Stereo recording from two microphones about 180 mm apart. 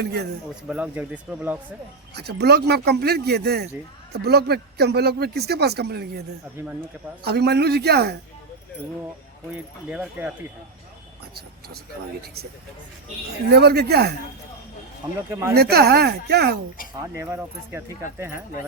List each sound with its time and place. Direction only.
0.0 s speech: 65° right (ahead or behind)
0.7 s speech: 10° right (ahead or behind)
2.1 s speech: 65° right (ahead or behind)
6.6 s speech: 15° right (ahead or behind)
7.3 s speech: 65° right (ahead or behind)
9.9 s speech: 5° right (ahead or behind)
13.5 s speech: 65° right (ahead or behind)
15.3 s speech: 15° right (ahead or behind)
15.5 s speech: 60° right (ahead or behind)
17.0 s speech: 15° right (ahead or behind)